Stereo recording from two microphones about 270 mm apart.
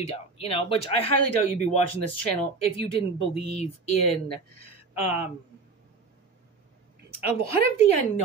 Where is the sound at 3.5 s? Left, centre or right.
Left.